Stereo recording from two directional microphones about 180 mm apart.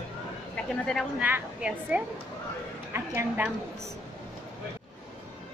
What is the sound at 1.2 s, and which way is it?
A woman's voice, 5° right (ahead or behind).